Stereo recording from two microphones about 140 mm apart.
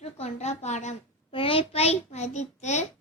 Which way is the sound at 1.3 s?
40° left (ahead or behind).